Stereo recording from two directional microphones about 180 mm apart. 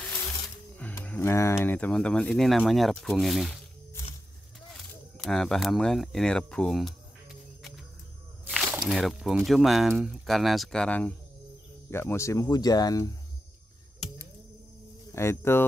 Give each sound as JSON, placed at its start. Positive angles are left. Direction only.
{"t": 0.7, "sound": "speech", "side_deg": 10}
{"t": 5.1, "sound": "speech", "side_deg": 0}
{"t": 8.5, "sound": "snake", "side_deg": 0}
{"t": 8.8, "sound": "speech", "side_deg": 0}
{"t": 15.1, "sound": "speech", "side_deg": 15}